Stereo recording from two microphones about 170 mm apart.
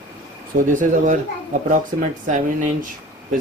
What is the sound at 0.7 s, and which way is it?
Speech, 50° right (ahead or behind).